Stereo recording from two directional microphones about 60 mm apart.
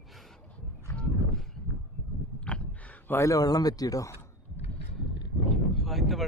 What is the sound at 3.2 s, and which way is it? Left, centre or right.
Speech, left.